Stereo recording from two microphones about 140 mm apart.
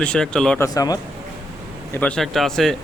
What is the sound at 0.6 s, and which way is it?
Speech, 25° left (ahead or behind).